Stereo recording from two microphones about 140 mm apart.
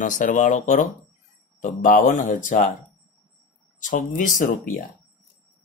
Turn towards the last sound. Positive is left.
turn(degrees=70)  # may be behind; listen again after turning